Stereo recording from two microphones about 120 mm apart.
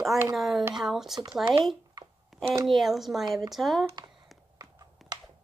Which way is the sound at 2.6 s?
Centre (ahead or behind).